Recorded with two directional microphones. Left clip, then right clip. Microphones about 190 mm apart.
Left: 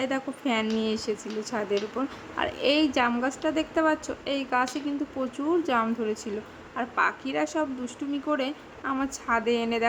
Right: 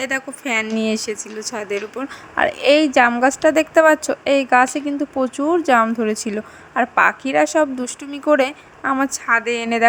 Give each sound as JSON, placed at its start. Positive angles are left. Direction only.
{"t": 0.0, "sound": "speech", "side_deg": -30}